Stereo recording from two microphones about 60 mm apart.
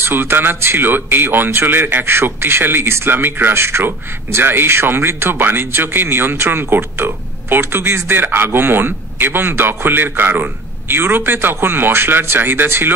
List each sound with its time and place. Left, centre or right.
0.0 s speech: right